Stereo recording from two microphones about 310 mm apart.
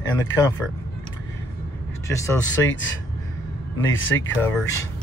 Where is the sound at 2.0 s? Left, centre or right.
Centre.